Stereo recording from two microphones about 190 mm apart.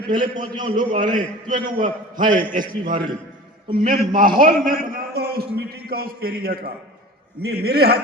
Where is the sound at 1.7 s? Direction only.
45° right (ahead or behind).